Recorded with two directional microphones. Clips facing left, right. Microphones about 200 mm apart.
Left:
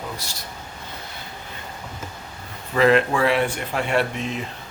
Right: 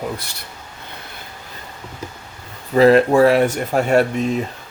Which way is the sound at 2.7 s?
35° right (ahead or behind).